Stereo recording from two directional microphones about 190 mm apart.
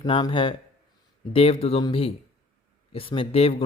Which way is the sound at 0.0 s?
25° left (ahead or behind).